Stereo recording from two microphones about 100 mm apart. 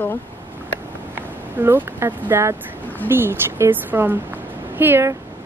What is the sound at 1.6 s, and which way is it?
Speech, 25° right (ahead or behind).